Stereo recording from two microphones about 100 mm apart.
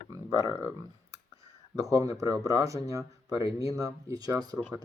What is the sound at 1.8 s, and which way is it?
Speech, 35° right (ahead or behind).